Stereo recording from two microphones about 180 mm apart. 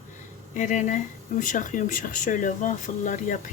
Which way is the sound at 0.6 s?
45° left (ahead or behind).